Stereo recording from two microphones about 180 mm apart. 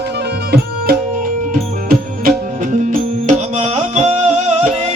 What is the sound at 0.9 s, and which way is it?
Music, 55° right (ahead or behind).